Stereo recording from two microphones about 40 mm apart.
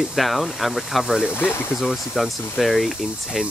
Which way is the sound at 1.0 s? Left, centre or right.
Centre.